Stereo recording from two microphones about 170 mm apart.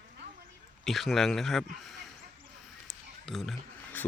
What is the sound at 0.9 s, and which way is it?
Speech, centre (ahead or behind).